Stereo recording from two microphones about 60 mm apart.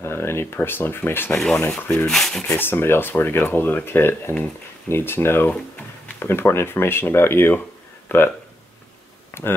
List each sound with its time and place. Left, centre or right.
0.0 s speech: left
1.3 s speech: centre
1.8 s speech: left
2.0 s speech: centre
2.4 s speech: left
9.4 s speech: left